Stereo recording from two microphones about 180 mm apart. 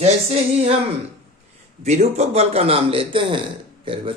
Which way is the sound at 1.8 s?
40° right (ahead or behind).